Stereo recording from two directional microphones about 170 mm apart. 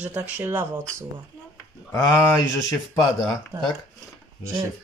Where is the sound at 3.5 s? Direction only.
10° right (ahead or behind).